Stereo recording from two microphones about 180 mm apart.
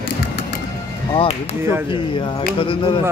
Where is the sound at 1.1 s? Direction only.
30° left (ahead or behind).